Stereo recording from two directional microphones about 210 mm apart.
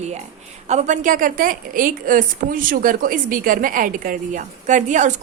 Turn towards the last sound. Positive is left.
turn(degrees=-35)  # may be behind; listen again after turning